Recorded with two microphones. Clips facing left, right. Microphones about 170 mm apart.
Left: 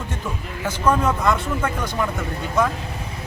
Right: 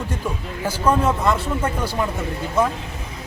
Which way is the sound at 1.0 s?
30° right (ahead or behind).